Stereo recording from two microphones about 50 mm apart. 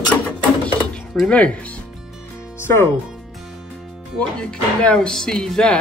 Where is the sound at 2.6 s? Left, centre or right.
Left.